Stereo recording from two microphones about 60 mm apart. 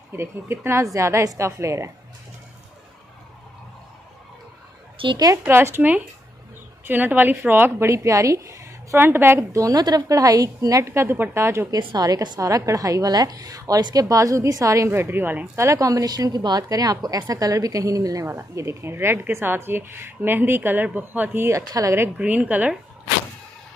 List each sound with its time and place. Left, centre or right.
0.1 s a woman's voice: right
0.9 s a woman's voice: right
5.5 s a woman's voice: right
6.9 s a woman's voice: right
7.8 s a woman's voice: right
8.9 s a woman's voice: right
9.4 s a woman's voice: right
11.7 s a woman's voice: right
14.9 s a woman's voice: right
15.5 s a woman's voice: right
18.2 s a woman's voice: right
21.5 s a woman's voice: right
22.1 s a woman's voice: right